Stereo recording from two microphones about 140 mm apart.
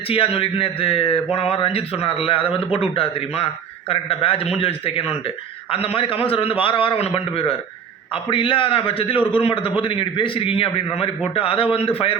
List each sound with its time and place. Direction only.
0.1 s a man's voice: 40° left (ahead or behind)